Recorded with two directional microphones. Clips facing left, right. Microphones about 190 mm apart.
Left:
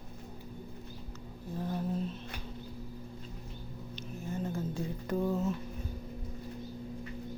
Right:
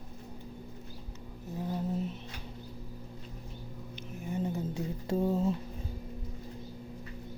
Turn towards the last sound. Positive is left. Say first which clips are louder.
# right 2 dB
turn(degrees=-30)  # may be behind; listen again after turning